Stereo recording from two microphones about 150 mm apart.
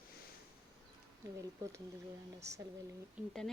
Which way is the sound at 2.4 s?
20° right (ahead or behind).